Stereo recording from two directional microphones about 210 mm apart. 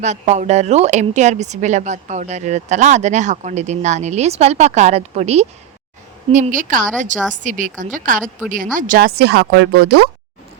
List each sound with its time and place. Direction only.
0.0 s a woman's voice: 35° right (ahead or behind); by 10.1 s 50° right (ahead or behind)